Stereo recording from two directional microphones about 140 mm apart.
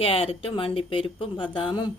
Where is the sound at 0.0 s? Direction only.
45° left (ahead or behind).